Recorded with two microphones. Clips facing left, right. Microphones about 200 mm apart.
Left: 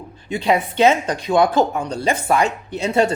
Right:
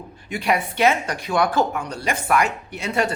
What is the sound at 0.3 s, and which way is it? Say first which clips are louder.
A man's voice: left 4 dB; 25° left (ahead or behind).